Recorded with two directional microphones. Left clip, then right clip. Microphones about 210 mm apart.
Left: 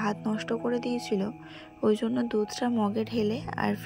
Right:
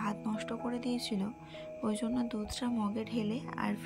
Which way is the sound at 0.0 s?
20° left (ahead or behind).